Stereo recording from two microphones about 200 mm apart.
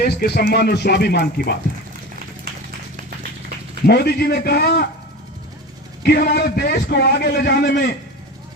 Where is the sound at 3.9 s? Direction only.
55° left (ahead or behind).